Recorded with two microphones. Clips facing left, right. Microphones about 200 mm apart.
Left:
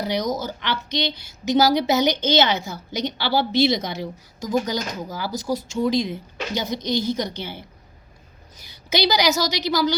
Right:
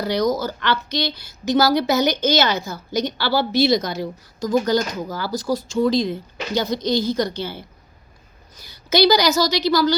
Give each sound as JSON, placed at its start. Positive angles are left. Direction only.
{"t": 0.0, "sound": "a woman's voice", "side_deg": 20}
{"t": 9.0, "sound": "a woman's voice", "side_deg": 20}